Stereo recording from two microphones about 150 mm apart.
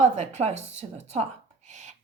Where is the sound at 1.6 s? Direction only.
50° right (ahead or behind).